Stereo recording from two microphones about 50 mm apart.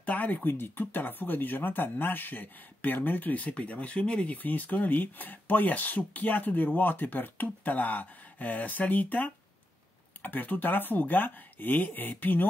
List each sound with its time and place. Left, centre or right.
0.0 s speech: left
4.4 s speech: left